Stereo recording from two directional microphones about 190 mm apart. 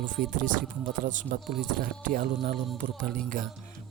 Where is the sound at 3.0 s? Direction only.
45° right (ahead or behind).